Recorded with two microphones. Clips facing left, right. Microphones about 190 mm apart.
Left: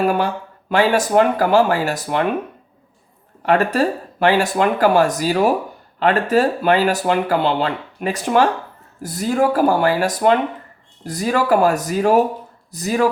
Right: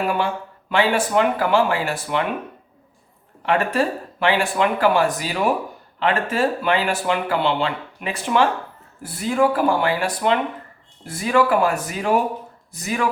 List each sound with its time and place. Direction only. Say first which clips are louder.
0.0 s speech: left 4 dB; 40° left (ahead or behind)
3.4 s speech: left 4 dB; 40° left (ahead or behind)